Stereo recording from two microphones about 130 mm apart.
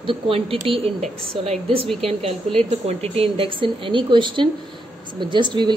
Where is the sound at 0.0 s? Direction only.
45° right (ahead or behind).